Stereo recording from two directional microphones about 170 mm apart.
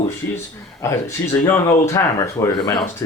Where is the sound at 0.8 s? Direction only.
15° left (ahead or behind).